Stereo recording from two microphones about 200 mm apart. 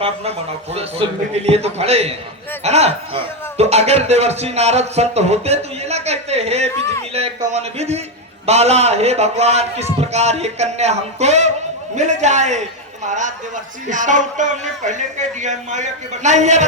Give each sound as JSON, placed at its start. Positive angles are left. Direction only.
{"t": 0.0, "sound": "speech", "side_deg": -30}